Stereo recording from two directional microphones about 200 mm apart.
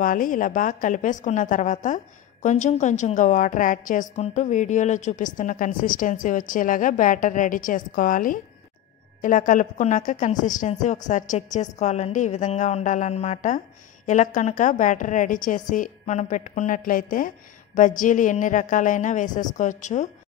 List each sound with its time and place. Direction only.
0.0 s a woman's voice: 45° left (ahead or behind)